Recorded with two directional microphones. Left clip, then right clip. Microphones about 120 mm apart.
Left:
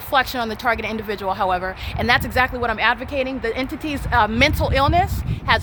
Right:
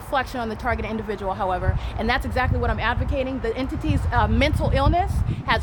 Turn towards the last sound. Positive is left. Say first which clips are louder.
# left 4 dB
turn(degrees=55)  # may be behind; listen again after turning